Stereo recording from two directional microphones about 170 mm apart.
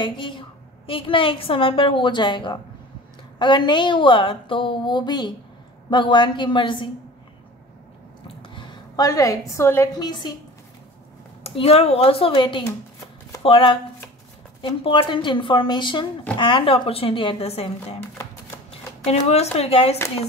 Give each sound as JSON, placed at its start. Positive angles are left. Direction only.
{"t": 0.0, "sound": "a woman's voice", "side_deg": 30}
{"t": 8.4, "sound": "a sound", "side_deg": 30}
{"t": 9.6, "sound": "a woman's voice", "side_deg": 15}
{"t": 11.4, "sound": "a woman's voice", "side_deg": 35}